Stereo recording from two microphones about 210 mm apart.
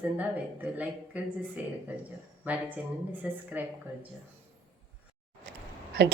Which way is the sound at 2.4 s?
5° right (ahead or behind).